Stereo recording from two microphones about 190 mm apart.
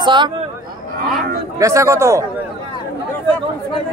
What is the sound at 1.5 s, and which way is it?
Speech, 15° right (ahead or behind).